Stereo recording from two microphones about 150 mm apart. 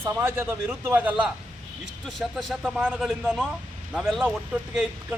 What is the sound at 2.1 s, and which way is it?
Speech, centre (ahead or behind).